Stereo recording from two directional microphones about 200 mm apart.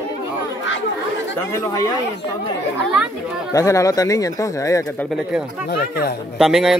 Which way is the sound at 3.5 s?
15° left (ahead or behind).